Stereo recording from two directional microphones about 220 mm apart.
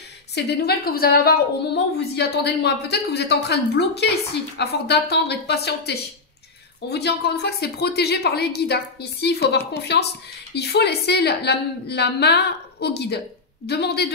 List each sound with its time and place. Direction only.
0.3 s a woman's voice: 45° left (ahead or behind)